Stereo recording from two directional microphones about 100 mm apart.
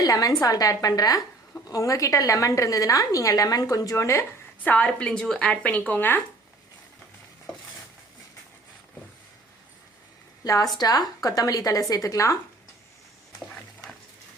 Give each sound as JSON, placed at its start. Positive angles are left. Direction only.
{"t": 0.0, "sound": "a woman's voice", "side_deg": 40}
{"t": 4.6, "sound": "speech", "side_deg": 15}
{"t": 10.4, "sound": "a woman's voice", "side_deg": 35}